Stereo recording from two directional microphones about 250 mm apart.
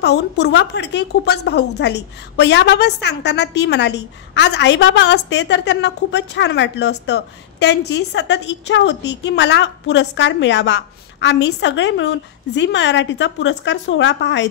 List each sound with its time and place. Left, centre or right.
0.0 s a woman's voice: left